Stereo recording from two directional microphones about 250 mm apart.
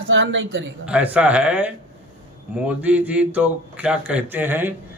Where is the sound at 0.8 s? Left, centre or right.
Centre.